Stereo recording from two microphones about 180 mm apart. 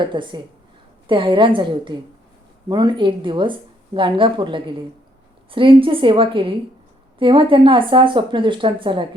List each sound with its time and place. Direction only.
0.0 s speech: 25° right (ahead or behind)